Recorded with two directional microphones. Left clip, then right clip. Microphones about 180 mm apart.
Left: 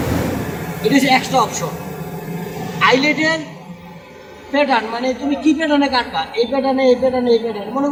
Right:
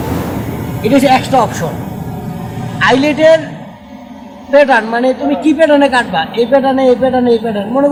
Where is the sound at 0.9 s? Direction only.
55° right (ahead or behind).